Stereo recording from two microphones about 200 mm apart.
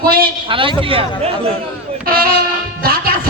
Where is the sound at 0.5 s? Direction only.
25° right (ahead or behind).